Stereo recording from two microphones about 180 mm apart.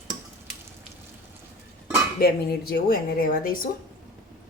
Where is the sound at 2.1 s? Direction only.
55° left (ahead or behind).